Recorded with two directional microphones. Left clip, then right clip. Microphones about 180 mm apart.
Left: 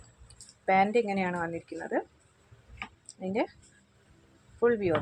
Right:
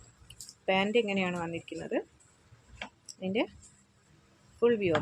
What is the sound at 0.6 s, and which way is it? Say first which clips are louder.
Speech: left 3 dB; 15° right (ahead or behind).